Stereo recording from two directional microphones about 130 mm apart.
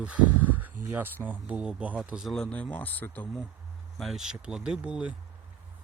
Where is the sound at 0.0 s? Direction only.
10° right (ahead or behind).